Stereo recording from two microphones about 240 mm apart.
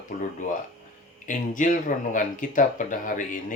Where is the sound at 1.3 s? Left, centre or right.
Left.